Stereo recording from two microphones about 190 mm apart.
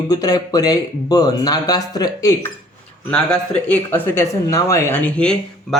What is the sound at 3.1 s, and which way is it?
Speech, 5° left (ahead or behind).